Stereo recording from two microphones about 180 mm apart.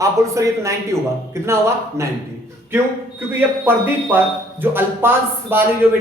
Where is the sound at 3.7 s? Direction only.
10° right (ahead or behind).